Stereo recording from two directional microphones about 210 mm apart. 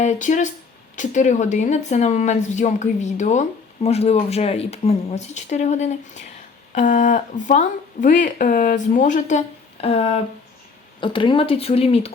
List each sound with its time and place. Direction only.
0.0 s speech: 35° left (ahead or behind)